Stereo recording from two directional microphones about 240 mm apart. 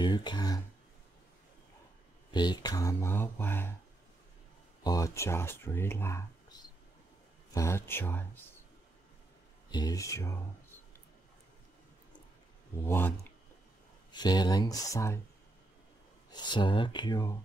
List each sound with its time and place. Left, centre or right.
0.0 s speech: centre
2.3 s speech: centre
4.8 s speech: centre
7.5 s speech: centre
9.7 s speech: centre
12.8 s speech: centre
14.1 s speech: centre
16.3 s speech: centre